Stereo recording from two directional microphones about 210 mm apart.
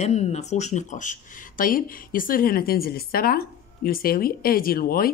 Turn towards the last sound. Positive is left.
turn(degrees=45)  # may be behind; listen again after turning